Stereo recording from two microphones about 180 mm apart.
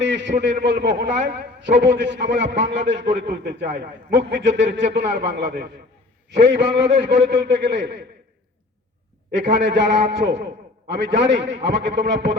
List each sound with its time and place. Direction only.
0.0 s a sound: 75° right (ahead or behind)
0.6 s a man's voice: 70° right (ahead or behind)
6.9 s a man's voice: 30° right (ahead or behind)
7.4 s a man's voice: 75° right (ahead or behind)
9.6 s a man's voice: 80° right